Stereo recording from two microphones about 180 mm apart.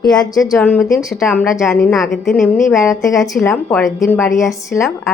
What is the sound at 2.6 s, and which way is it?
Speech, 15° left (ahead or behind).